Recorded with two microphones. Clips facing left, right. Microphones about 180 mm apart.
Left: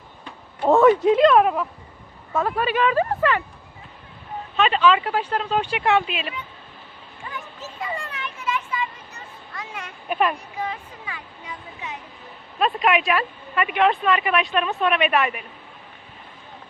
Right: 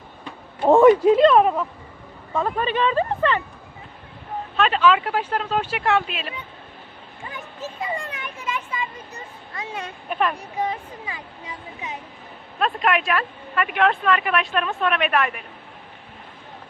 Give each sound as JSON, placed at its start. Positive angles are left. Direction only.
{"t": 0.6, "sound": "a sound", "side_deg": -15}
{"t": 1.0, "sound": "a woman's voice", "side_deg": 0}
{"t": 4.5, "sound": "a woman's voice", "side_deg": 0}
{"t": 8.1, "sound": "children playing", "side_deg": -20}
{"t": 9.6, "sound": "speech", "side_deg": -30}
{"t": 10.1, "sound": "speech", "side_deg": 5}
{"t": 12.5, "sound": "a woman's voice", "side_deg": 5}